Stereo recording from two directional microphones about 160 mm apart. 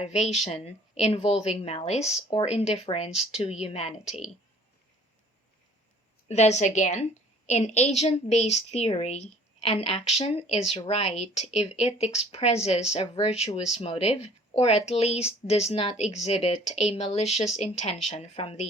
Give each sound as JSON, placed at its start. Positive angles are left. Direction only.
{"t": 0.0, "sound": "a woman's voice", "side_deg": 45}
{"t": 6.2, "sound": "a woman's voice", "side_deg": 45}